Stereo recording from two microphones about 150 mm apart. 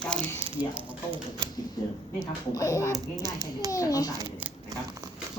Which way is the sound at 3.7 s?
20° left (ahead or behind).